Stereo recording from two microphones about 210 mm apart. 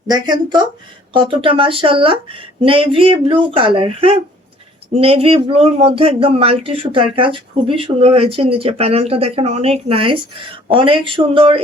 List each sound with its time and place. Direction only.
0.1 s speech: 20° right (ahead or behind)